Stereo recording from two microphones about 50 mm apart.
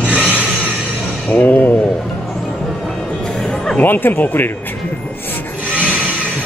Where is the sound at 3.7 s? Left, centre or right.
Left.